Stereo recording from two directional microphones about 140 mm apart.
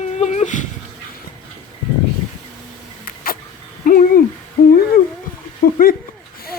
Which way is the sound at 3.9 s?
90° left.